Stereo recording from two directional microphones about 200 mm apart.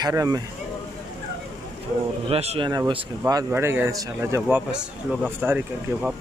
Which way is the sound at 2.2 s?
30° right (ahead or behind).